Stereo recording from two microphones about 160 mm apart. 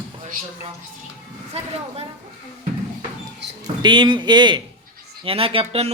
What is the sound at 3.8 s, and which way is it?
Speech, 30° right (ahead or behind).